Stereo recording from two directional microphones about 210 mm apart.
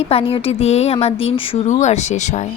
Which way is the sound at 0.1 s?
25° left (ahead or behind).